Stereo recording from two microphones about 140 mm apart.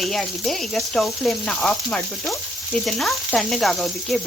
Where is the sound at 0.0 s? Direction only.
Centre (ahead or behind).